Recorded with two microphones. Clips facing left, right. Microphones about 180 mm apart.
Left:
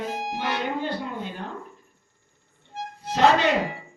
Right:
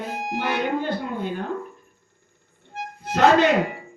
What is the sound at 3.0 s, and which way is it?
Music, 50° right (ahead or behind).